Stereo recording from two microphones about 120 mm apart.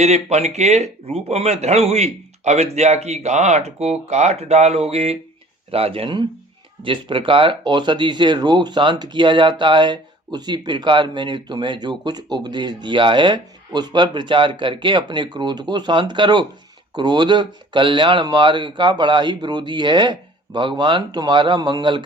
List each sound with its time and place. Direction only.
0.0 s speech: 65° right (ahead or behind); by 22.0 s 40° right (ahead or behind)